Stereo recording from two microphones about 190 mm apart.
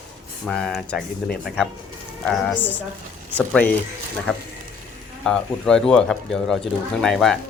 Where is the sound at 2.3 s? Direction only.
5° left (ahead or behind).